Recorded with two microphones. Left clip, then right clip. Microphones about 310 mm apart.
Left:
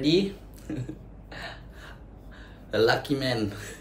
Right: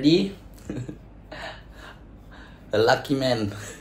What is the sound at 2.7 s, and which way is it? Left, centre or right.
Speech, centre.